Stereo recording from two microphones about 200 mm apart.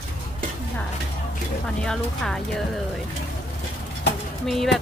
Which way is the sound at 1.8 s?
Centre (ahead or behind).